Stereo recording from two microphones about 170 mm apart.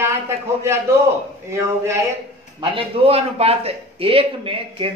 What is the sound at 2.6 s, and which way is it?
A man's voice, 35° right (ahead or behind).